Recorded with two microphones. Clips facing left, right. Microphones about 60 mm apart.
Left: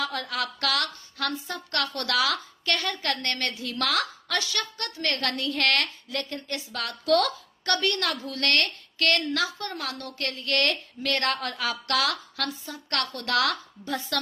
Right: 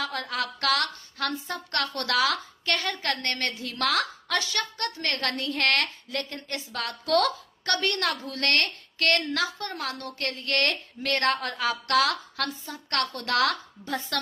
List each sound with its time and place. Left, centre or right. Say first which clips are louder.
0.0 s a woman's voice: even; right
1.3 s a woman's voice: even; right